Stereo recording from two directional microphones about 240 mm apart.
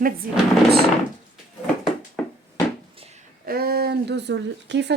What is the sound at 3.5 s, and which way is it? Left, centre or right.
Speech, right.